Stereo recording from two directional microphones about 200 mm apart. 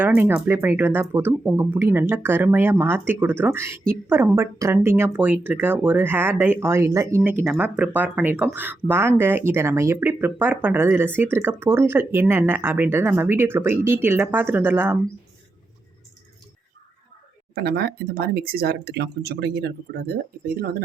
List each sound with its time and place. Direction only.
0.0 s speech: 10° right (ahead or behind)
17.5 s speech: 50° right (ahead or behind)